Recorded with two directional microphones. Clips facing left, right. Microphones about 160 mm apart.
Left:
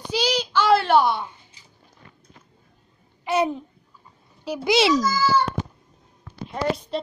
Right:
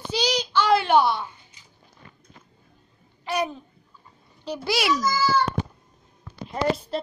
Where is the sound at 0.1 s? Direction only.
10° left (ahead or behind).